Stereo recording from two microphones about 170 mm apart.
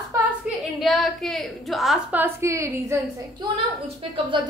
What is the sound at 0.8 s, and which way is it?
A woman's voice, centre (ahead or behind).